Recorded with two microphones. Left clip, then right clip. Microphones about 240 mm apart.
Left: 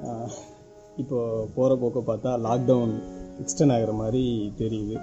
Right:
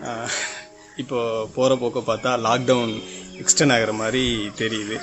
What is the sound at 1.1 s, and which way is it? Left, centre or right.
A man's voice, right.